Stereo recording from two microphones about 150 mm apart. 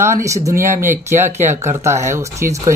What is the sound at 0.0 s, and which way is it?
Speech, 20° right (ahead or behind).